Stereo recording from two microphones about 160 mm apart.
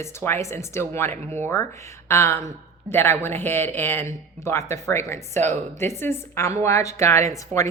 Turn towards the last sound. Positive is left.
turn(degrees=20)  # may be behind; listen again after turning